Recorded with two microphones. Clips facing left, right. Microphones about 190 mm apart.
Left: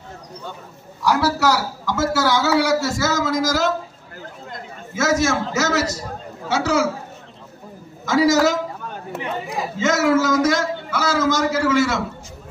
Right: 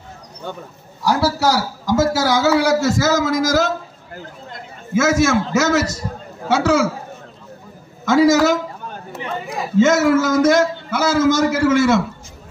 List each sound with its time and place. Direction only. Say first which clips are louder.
1.0 s a man's voice: right 1 dB; 30° right (ahead or behind)
4.9 s a man's voice: right 4 dB; 50° right (ahead or behind)
8.0 s a man's voice: right 3 dB; 55° right (ahead or behind)
10.0 s a man's voice: right 3 dB; 55° right (ahead or behind)